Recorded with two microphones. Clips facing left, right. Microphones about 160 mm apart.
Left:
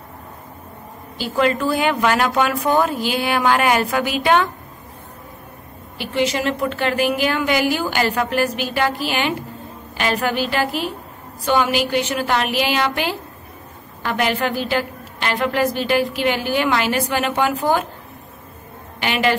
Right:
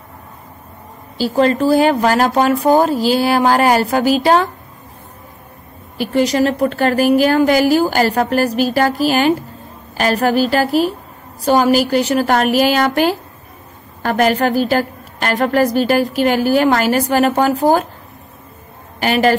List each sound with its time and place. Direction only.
1.1 s a woman's voice: 35° right (ahead or behind)
5.9 s a woman's voice: 40° right (ahead or behind)
18.9 s a woman's voice: 40° right (ahead or behind)